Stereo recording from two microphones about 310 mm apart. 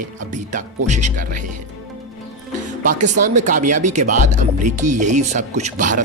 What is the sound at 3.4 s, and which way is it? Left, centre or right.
Speech, right.